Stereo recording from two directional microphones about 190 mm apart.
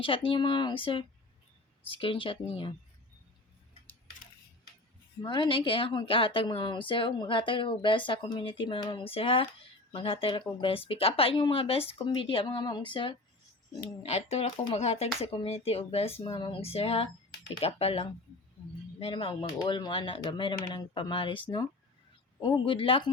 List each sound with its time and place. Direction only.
0.3 s a woman's voice: 25° left (ahead or behind)
5.2 s a woman's voice: 25° left (ahead or behind)